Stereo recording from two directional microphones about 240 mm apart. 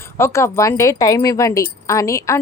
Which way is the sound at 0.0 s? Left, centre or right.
Centre.